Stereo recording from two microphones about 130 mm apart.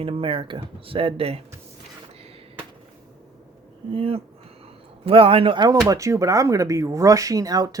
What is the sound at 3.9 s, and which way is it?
Speech, 45° right (ahead or behind).